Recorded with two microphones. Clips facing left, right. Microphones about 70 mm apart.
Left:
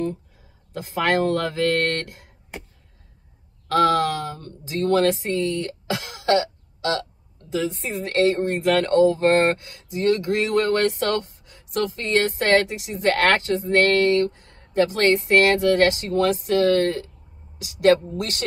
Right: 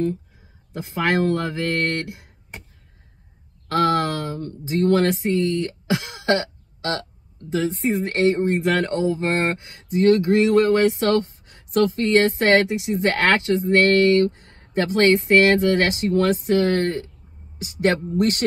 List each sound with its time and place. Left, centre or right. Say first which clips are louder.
0.7 s speech: even; right
3.6 s speech: left 1 dB; right
10.5 s speech: right 4 dB; centre
14.2 s speech: right 3 dB; right